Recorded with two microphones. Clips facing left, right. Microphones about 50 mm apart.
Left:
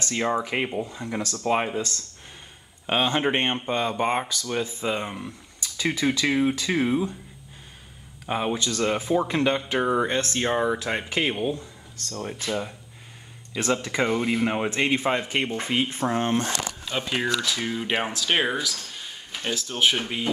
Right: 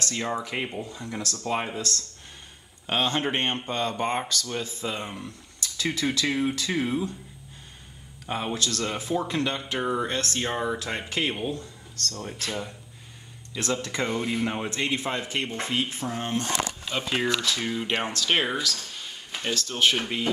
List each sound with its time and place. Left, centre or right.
0.0 s speech: centre
8.3 s speech: centre
16.0 s speech: left
16.9 s speech: centre